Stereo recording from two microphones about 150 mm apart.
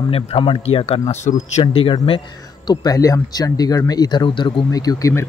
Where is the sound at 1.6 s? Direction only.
35° left (ahead or behind).